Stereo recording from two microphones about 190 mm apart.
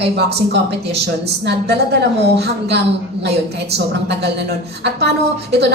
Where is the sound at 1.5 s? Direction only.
60° right (ahead or behind).